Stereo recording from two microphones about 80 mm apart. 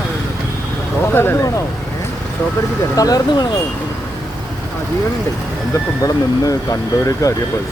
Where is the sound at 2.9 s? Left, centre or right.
Left.